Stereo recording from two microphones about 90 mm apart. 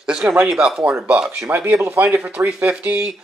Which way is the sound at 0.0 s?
10° right (ahead or behind).